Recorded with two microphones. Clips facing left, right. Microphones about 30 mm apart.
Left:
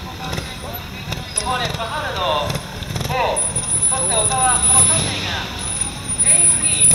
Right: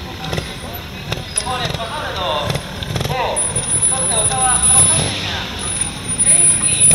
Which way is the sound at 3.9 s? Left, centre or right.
Centre.